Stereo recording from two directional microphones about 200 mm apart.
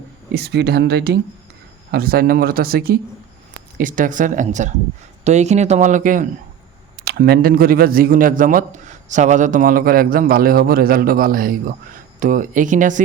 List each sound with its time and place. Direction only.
0.3 s a man's voice: 55° right (ahead or behind); by 13.0 s 40° right (ahead or behind)